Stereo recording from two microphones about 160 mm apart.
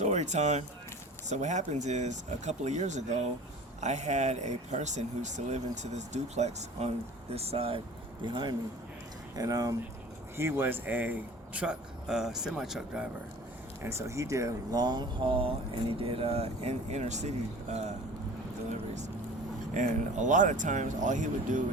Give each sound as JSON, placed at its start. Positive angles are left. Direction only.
{"t": 0.0, "sound": "speech", "side_deg": -45}
{"t": 13.8, "sound": "speech", "side_deg": -20}
{"t": 19.7, "sound": "speech", "side_deg": -50}